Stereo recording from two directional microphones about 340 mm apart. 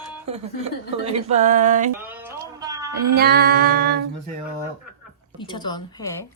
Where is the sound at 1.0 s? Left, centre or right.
Centre.